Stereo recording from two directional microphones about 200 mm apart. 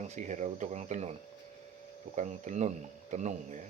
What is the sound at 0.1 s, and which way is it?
Speech, 40° right (ahead or behind).